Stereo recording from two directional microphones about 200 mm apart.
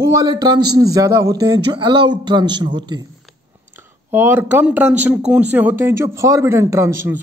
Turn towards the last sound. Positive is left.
turn(degrees=-15)  # may be behind; listen again after turning